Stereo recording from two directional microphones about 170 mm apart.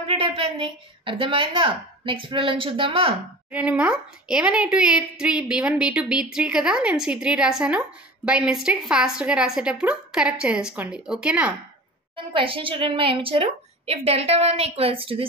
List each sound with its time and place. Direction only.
0.0 s a woman's voice: 30° right (ahead or behind)
3.5 s a child's voice: 5° right (ahead or behind)
12.4 s a woman's voice: 30° right (ahead or behind)